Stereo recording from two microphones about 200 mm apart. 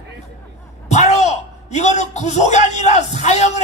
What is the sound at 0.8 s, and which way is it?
A man's voice, 35° left (ahead or behind).